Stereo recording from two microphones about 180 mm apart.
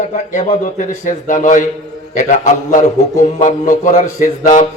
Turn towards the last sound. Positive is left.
turn(degrees=45)  # may be behind; listen again after turning